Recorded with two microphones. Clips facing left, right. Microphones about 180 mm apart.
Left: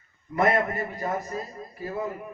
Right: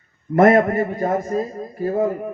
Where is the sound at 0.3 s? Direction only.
55° right (ahead or behind).